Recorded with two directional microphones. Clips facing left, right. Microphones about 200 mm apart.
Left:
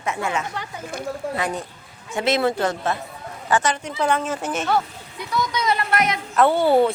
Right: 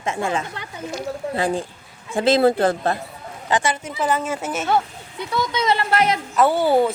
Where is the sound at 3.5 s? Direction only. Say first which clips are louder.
Even; 15° right (ahead or behind).